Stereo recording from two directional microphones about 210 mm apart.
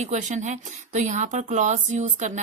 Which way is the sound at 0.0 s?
35° right (ahead or behind).